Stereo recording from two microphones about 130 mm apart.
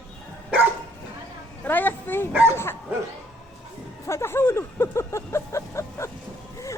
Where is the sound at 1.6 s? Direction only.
15° left (ahead or behind).